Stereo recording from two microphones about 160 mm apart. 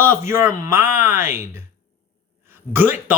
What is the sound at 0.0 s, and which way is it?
Speech, 15° right (ahead or behind).